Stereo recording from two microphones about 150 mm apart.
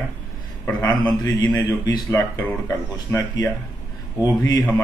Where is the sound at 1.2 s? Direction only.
25° left (ahead or behind).